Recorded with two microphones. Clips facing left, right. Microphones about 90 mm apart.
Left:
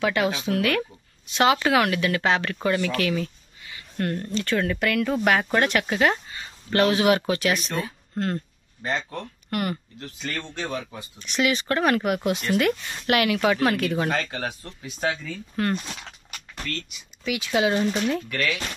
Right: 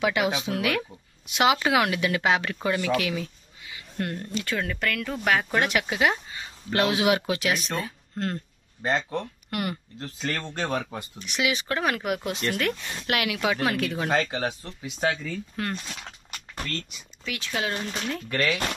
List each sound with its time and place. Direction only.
0.0 s speech: 15° right (ahead or behind); by 8.4 s centre (ahead or behind)
8.8 s speech: 25° right (ahead or behind)
9.2 s speech: 5° right (ahead or behind)
9.9 s speech: 30° right (ahead or behind)
10.6 s speech: 55° right (ahead or behind)
11.1 s speech: 5° right (ahead or behind)
14.1 s speech: 20° right (ahead or behind)
15.0 s speech: 5° left (ahead or behind)
16.3 s a sound: 30° right (ahead or behind)
17.2 s speech: 10° left (ahead or behind)